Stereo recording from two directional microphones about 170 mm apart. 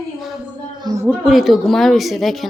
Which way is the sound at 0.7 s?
25° right (ahead or behind).